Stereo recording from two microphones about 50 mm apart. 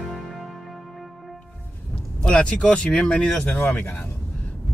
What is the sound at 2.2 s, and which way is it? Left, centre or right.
Speech, centre.